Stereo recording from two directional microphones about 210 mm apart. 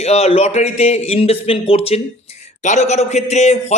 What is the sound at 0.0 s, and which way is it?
A man's voice, 30° left (ahead or behind).